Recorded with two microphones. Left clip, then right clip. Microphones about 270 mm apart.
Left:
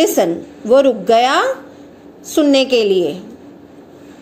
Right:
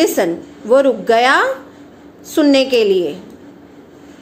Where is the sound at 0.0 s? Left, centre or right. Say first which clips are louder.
Left 1 dB; centre.